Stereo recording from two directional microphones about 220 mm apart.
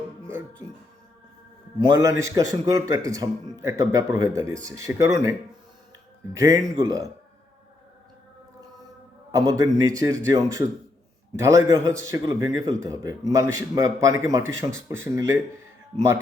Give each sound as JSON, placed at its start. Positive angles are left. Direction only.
{"t": 1.9, "sound": "a man's voice", "side_deg": -15}
{"t": 6.3, "sound": "a man's voice", "side_deg": -15}
{"t": 9.3, "sound": "a man's voice", "side_deg": -15}